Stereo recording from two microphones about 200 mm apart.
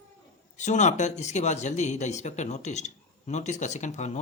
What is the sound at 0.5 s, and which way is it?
A man's voice, 35° left (ahead or behind).